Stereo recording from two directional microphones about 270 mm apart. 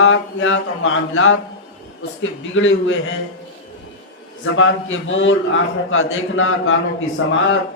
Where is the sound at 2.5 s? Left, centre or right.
Left.